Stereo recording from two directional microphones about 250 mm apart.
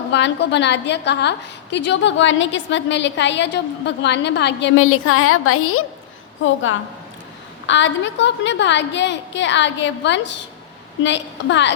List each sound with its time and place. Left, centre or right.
0.1 s a woman's voice: left